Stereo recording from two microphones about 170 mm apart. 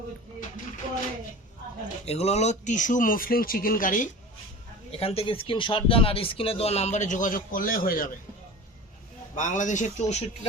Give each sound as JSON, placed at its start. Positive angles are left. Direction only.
{"t": 2.0, "sound": "speech", "side_deg": 40}
{"t": 4.9, "sound": "speech", "side_deg": 35}
{"t": 9.3, "sound": "speech", "side_deg": 50}